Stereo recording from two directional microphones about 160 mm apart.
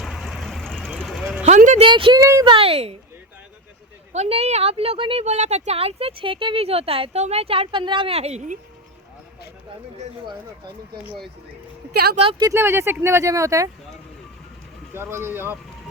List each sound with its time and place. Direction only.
0.0 s vehicle: centre (ahead or behind)
1.5 s speech: 50° right (ahead or behind)
1.8 s speech: 35° right (ahead or behind)
4.1 s speech: 40° right (ahead or behind)
12.1 s speech: 35° right (ahead or behind)
12.5 s speech: 15° right (ahead or behind)
14.9 s speech: 15° right (ahead or behind)